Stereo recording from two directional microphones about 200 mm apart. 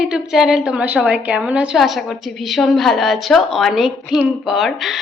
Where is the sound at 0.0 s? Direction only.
5° right (ahead or behind).